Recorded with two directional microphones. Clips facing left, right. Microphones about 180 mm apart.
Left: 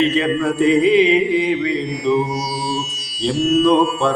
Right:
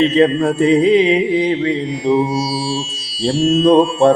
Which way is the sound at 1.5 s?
25° right (ahead or behind).